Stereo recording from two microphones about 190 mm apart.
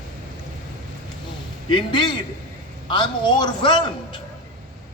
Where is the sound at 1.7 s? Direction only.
25° left (ahead or behind).